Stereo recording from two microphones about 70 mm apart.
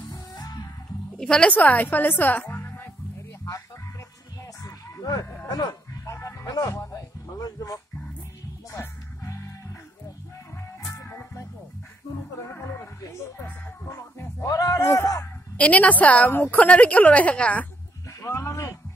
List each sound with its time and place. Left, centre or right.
0.1 s music: left
1.1 s a woman's voice: centre; by 2.9 s left
4.6 s honk: left
5.2 s a sound: left
5.5 s speech: left
6.0 s dog: left
6.4 s speech: left
8.7 s music: left
10.9 s music: left
12.4 s speech: left
14.5 s a man's voice: left
15.5 s a woman's voice: centre
18.5 s music: left